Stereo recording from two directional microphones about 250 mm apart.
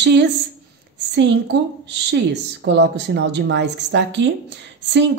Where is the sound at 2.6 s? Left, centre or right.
Right.